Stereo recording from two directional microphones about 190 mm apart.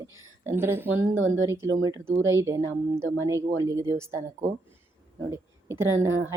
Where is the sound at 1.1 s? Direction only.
90° right.